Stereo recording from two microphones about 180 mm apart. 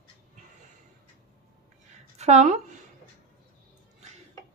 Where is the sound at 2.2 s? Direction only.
40° right (ahead or behind).